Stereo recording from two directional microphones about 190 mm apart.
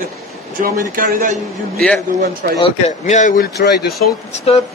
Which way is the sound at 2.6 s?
35° left (ahead or behind).